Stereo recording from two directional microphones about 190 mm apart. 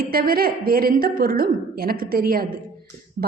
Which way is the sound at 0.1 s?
50° right (ahead or behind).